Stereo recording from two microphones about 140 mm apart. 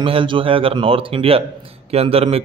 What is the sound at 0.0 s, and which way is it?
A man's voice, 40° right (ahead or behind).